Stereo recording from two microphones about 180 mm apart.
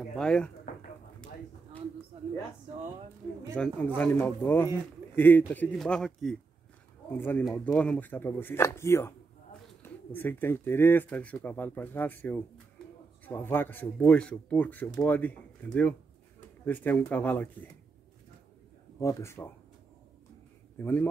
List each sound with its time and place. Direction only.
0.1 s speech: 5° left (ahead or behind)
3.5 s speech: 10° left (ahead or behind)
10.1 s speech: 10° left (ahead or behind)
18.9 s speech: 15° left (ahead or behind)
20.7 s speech: 10° left (ahead or behind)